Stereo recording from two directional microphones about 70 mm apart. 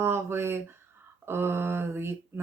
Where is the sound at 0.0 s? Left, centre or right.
Right.